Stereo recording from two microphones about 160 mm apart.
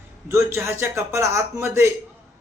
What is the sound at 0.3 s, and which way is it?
A man's voice, 15° right (ahead or behind).